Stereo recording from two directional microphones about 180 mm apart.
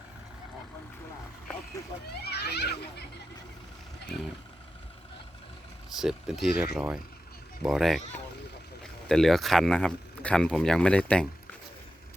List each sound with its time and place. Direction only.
2.2 s a child's voice: 65° left (ahead or behind)
5.9 s speech: centre (ahead or behind)